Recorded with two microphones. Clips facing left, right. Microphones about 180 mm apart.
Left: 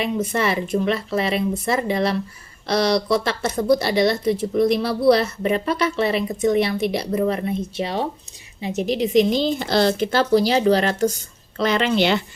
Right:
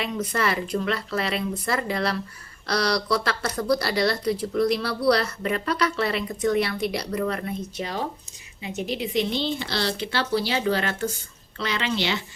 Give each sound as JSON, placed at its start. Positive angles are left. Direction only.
{"t": 0.0, "sound": "speech", "side_deg": 25}
{"t": 8.6, "sound": "speech", "side_deg": 35}